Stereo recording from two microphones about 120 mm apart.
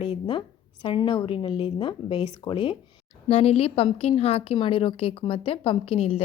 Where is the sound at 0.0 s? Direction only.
45° left (ahead or behind).